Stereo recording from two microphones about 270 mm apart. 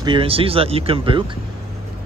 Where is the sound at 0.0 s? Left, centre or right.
Centre.